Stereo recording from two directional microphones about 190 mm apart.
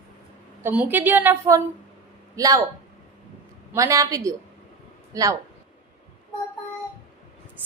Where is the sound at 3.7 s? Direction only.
15° right (ahead or behind).